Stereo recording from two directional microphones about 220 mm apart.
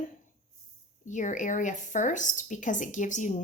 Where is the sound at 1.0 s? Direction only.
35° left (ahead or behind).